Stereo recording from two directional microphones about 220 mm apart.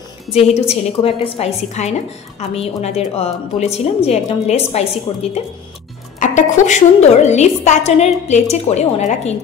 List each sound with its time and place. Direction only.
0.3 s a woman's voice: 30° left (ahead or behind)